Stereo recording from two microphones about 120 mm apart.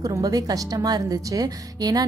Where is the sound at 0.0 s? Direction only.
30° right (ahead or behind).